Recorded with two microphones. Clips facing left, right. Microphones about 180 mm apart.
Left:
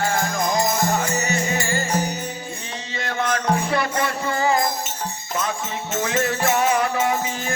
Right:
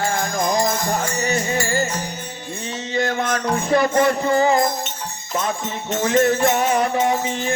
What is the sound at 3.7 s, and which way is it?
Music, 40° right (ahead or behind).